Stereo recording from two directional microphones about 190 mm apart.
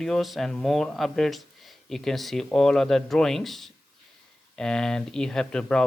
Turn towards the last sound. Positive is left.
turn(degrees=5)  # may be behind; listen again after turning